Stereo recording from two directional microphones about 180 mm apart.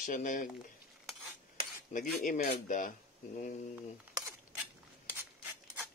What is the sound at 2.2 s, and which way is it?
Speech, 45° left (ahead or behind).